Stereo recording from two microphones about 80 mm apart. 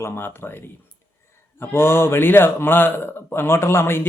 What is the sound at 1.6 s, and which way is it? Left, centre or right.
Speech, left.